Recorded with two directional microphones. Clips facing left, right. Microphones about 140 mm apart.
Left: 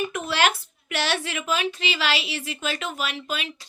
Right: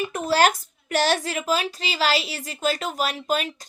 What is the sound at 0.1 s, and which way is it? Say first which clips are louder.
A woman's voice: right 4 dB; 40° right (ahead or behind).